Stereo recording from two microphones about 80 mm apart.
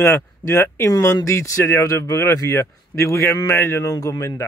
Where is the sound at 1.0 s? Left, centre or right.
Left.